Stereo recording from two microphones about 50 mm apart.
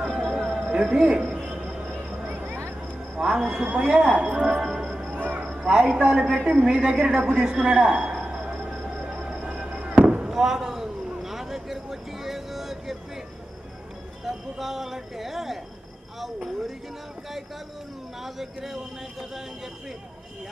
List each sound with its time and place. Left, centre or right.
0.0 s music: centre
0.5 s a man's voice: centre
1.4 s music: centre
3.2 s speech: centre
5.1 s a sound: right
5.4 s a sound: centre
5.9 s a woman's voice: right
6.4 s speech: centre
7.4 s music: centre
8.5 s fireworks: centre
10.0 s a sound: centre
14.6 s speech: centre
18.2 s speech: centre